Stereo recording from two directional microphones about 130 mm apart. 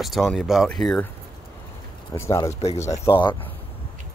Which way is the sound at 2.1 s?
25° left (ahead or behind).